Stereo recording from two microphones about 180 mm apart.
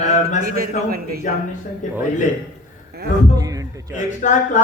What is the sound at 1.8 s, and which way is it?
Speech, 45° left (ahead or behind).